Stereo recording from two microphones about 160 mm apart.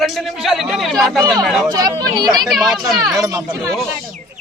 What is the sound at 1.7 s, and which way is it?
Speech, 25° right (ahead or behind).